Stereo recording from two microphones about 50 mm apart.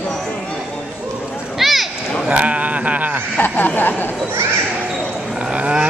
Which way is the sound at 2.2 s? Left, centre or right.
Right.